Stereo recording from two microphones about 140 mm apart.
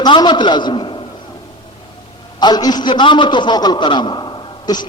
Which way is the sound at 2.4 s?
30° left (ahead or behind).